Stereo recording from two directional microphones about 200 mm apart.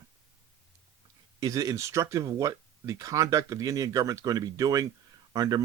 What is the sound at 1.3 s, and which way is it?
Speech, 15° right (ahead or behind).